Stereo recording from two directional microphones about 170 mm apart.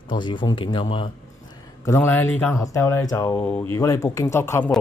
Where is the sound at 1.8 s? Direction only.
15° left (ahead or behind).